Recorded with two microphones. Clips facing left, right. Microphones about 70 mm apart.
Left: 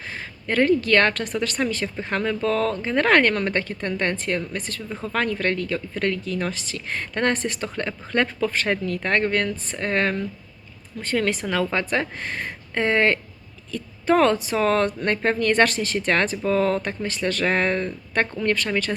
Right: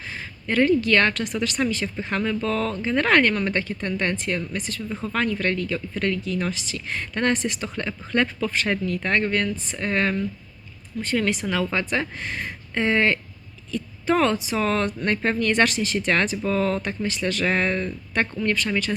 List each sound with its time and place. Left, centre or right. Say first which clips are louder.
0.4 s a woman's voice: even; left